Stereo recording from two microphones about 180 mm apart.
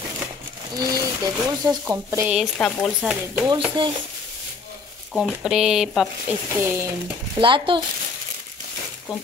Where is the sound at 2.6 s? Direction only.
Centre (ahead or behind).